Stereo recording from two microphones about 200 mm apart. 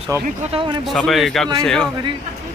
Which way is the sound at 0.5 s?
25° right (ahead or behind).